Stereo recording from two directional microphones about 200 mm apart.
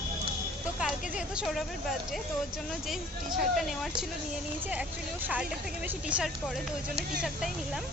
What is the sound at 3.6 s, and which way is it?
A woman's voice, centre (ahead or behind).